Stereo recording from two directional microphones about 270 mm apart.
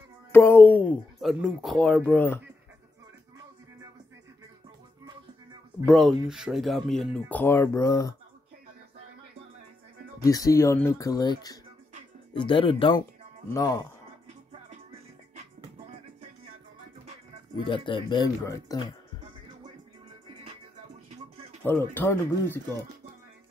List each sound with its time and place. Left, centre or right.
0.3 s speech: centre
5.9 s speech: centre
10.2 s speech: centre
17.6 s speech: centre
21.6 s speech: centre